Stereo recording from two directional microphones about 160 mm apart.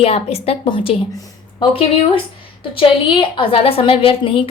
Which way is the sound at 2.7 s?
35° left (ahead or behind).